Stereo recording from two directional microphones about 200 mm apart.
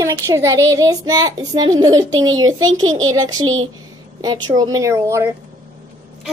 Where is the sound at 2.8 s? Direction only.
80° right.